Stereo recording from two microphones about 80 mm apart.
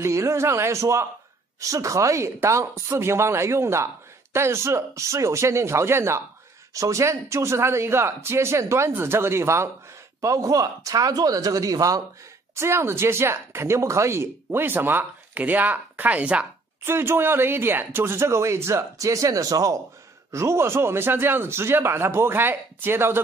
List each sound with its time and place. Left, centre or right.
0.0 s speech: right
12.5 s speech: right; by 16.4 s centre
16.8 s speech: right
20.2 s speech: right